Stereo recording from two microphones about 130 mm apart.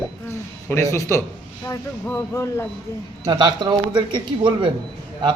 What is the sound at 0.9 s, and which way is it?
Speech, 25° left (ahead or behind).